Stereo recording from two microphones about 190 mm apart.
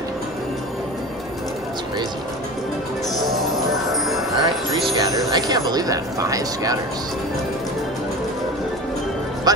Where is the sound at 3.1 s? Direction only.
Centre (ahead or behind).